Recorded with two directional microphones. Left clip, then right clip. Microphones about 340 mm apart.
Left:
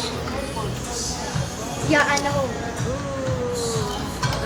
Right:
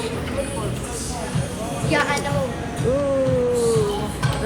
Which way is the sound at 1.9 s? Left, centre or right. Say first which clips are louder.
Left 2 dB; left.